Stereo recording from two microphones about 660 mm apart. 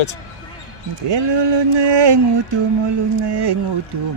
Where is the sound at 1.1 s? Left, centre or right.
Right.